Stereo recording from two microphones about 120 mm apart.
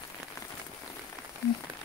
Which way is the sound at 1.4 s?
20° left (ahead or behind).